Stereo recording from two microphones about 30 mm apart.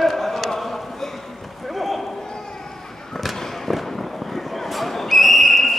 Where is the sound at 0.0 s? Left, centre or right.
Centre.